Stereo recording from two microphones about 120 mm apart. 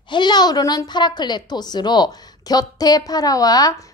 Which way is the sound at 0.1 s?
35° left (ahead or behind).